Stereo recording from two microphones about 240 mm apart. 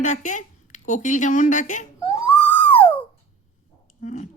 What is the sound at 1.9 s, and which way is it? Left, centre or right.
Wail, left.